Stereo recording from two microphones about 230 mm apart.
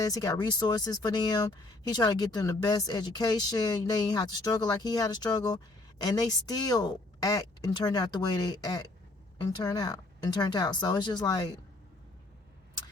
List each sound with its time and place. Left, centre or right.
0.0 s speech: centre